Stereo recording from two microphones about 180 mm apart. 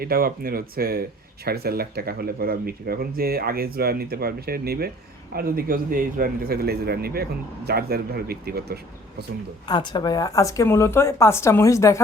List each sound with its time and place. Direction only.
0.0 s a man's voice: 55° right (ahead or behind)
9.6 s a woman's voice: 25° left (ahead or behind)